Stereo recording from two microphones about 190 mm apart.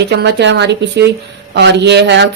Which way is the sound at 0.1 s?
60° right (ahead or behind).